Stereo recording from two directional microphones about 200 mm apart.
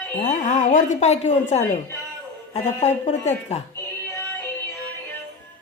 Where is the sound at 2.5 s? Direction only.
35° left (ahead or behind).